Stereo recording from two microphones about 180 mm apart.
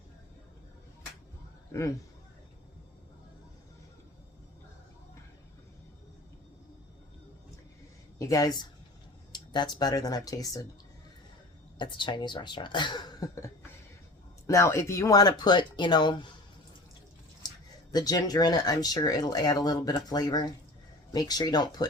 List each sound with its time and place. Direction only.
1.7 s speech: 15° left (ahead or behind)
8.2 s speech: 20° left (ahead or behind)
11.8 s speech: 25° left (ahead or behind)
17.9 s speech: 20° left (ahead or behind)